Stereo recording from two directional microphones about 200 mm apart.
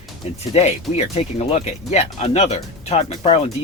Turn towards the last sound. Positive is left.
turn(degrees=30)  # may be behind; listen again after turning